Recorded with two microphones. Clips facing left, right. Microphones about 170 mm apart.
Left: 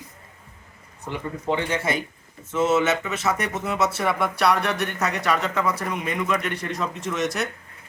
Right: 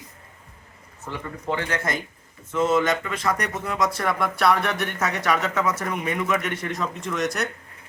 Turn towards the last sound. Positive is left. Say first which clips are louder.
# even
turn(degrees=0)  # may be behind; listen again after turning